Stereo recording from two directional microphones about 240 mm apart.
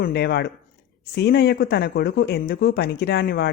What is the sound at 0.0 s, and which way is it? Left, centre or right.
Speech, left.